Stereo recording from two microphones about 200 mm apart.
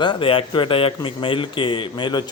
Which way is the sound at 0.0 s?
25° left (ahead or behind).